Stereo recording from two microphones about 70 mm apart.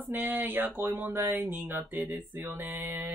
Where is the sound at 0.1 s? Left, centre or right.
Right.